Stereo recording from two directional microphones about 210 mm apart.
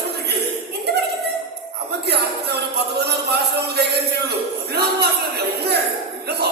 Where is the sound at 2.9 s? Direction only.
50° right (ahead or behind).